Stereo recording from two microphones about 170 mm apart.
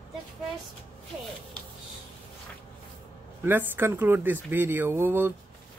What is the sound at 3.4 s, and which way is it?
Speech, 10° right (ahead or behind).